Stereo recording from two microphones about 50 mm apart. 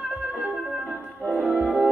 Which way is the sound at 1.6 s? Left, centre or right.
Centre.